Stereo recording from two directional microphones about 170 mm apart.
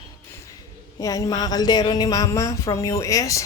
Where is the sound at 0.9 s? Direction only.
20° left (ahead or behind).